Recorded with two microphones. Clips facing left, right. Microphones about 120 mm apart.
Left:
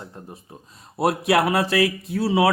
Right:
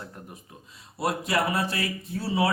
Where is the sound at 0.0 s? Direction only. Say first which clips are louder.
Left 3 dB; 25° left (ahead or behind).